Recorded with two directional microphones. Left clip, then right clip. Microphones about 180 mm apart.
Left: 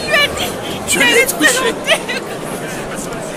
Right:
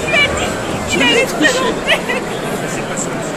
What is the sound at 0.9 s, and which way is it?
Music, 55° left (ahead or behind).